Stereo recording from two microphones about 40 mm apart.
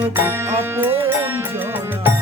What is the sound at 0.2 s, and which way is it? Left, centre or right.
Music, right.